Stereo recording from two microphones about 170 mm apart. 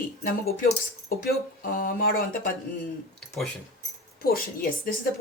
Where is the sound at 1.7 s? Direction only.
55° left (ahead or behind).